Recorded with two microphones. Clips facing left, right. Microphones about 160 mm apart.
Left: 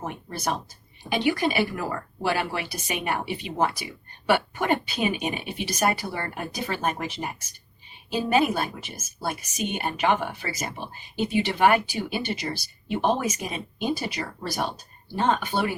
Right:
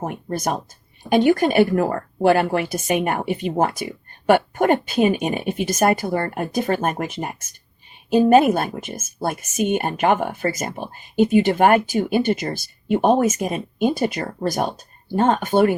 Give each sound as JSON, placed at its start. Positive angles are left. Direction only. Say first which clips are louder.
{"t": 0.0, "sound": "a woman's voice", "louder": "right 6 dB", "side_deg": -45}